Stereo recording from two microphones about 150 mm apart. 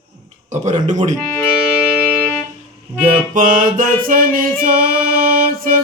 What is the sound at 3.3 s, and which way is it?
Music, 65° right (ahead or behind).